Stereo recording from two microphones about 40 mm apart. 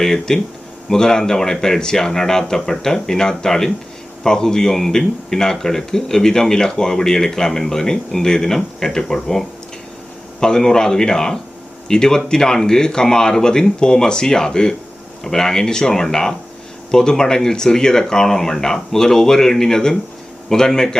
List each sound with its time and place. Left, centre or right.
0.0 s speech: centre
10.4 s speech: centre